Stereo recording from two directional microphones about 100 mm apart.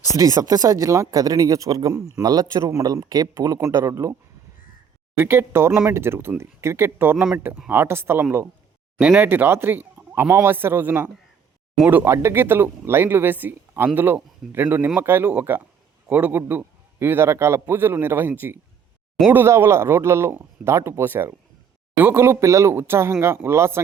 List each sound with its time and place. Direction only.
0.2 s speech: 35° right (ahead or behind)
5.1 s speech: 25° right (ahead or behind)
9.0 s speech: 10° right (ahead or behind)